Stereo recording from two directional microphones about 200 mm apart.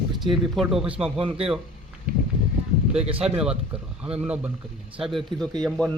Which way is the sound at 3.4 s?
5° right (ahead or behind).